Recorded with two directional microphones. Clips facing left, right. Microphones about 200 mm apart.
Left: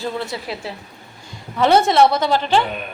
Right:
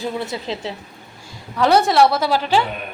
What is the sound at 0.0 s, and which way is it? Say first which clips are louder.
Speech: even; 20° right (ahead or behind).